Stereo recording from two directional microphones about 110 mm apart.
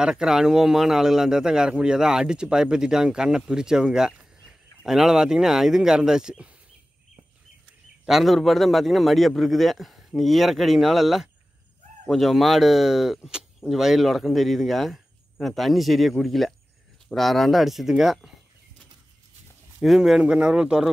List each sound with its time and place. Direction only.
0.0 s speech: 5° right (ahead or behind)
8.0 s speech: centre (ahead or behind)
19.8 s speech: centre (ahead or behind)